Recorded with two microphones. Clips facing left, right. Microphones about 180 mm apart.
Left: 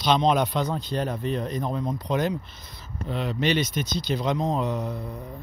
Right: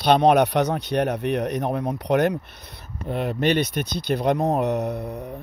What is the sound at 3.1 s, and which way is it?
Speech, 55° right (ahead or behind).